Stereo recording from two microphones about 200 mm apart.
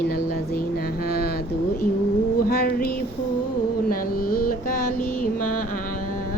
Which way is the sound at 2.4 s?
50° left (ahead or behind).